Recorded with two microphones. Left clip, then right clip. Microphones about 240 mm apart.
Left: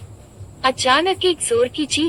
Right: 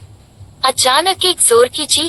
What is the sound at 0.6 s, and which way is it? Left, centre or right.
Speech, centre.